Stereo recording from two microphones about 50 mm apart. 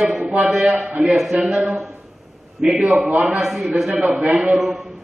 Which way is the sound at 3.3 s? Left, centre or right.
Centre.